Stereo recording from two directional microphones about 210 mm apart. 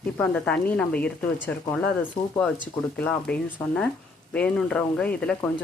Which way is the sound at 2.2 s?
25° left (ahead or behind).